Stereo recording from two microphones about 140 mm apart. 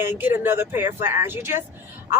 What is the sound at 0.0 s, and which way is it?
Speech, 15° right (ahead or behind).